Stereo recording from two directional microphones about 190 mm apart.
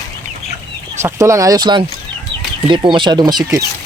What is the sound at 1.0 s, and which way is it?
Speech, 15° right (ahead or behind).